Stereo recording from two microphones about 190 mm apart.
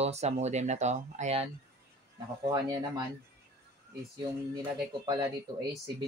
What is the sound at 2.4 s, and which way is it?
Speech, 20° right (ahead or behind).